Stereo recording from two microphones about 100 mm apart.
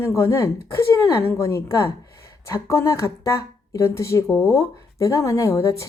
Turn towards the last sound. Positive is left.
turn(degrees=30)  # may be behind; listen again after turning